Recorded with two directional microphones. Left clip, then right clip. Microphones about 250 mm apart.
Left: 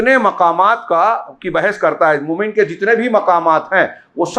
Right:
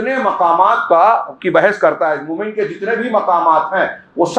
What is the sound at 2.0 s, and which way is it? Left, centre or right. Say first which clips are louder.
Speech: left 3 dB; left.